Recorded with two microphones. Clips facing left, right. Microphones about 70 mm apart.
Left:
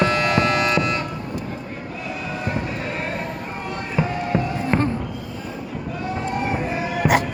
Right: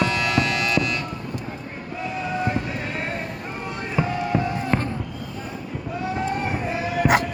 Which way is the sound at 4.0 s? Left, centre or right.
Centre.